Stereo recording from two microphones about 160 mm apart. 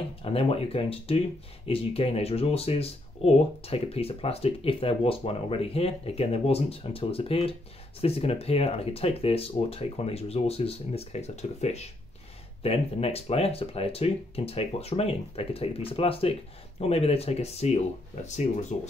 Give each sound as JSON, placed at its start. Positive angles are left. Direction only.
{"t": 0.2, "sound": "speech", "side_deg": 35}